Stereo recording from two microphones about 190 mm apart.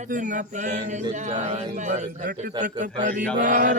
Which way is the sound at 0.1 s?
40° right (ahead or behind).